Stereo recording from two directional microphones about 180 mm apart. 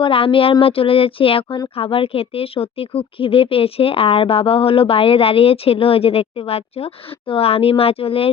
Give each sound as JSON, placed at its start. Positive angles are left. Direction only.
{"t": 0.0, "sound": "speech", "side_deg": 30}